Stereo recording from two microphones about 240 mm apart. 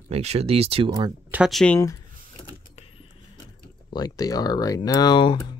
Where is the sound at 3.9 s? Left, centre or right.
Centre.